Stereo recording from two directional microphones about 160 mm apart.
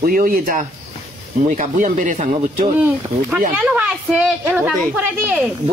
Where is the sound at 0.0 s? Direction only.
65° right (ahead or behind).